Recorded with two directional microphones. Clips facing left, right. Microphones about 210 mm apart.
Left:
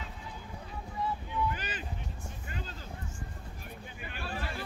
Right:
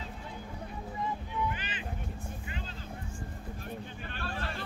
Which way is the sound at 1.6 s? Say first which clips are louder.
Left 2 dB; 40° left (ahead or behind).